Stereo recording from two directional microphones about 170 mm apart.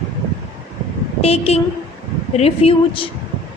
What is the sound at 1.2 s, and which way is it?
A woman's voice, 35° left (ahead or behind).